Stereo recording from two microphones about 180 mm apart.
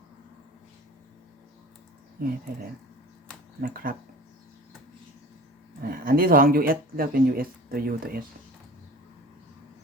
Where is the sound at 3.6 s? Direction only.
50° right (ahead or behind).